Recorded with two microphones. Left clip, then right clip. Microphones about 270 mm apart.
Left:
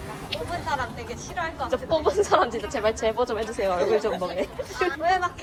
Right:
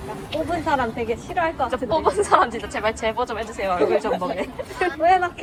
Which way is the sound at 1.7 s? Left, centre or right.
Centre.